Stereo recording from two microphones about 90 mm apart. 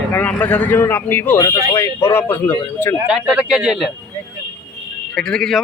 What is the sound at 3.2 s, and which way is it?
Speech, 10° right (ahead or behind).